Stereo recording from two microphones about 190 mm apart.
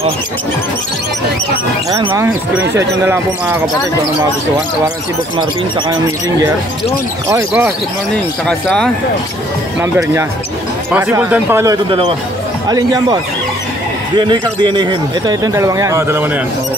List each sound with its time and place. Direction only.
2.0 s speech: 10° right (ahead or behind)
6.0 s speech: 15° right (ahead or behind)
8.5 s speech: 5° left (ahead or behind)
10.9 s a man's voice: 10° right (ahead or behind)